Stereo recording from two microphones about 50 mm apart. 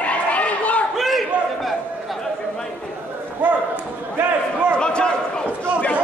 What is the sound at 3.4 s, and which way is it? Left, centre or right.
Basketball bounce, right.